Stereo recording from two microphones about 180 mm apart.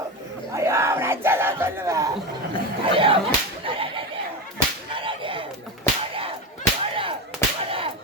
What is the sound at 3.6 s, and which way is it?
Whip, 30° right (ahead or behind).